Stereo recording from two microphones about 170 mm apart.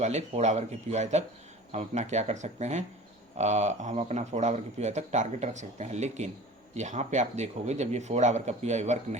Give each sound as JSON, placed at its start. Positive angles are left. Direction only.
{"t": 0.0, "sound": "speech", "side_deg": -40}